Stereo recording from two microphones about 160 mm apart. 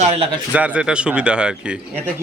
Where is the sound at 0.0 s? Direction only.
40° right (ahead or behind).